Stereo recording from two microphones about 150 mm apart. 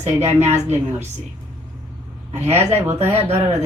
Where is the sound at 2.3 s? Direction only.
45° right (ahead or behind).